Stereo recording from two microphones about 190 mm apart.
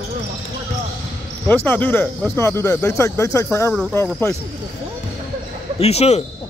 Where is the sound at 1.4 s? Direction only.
10° left (ahead or behind).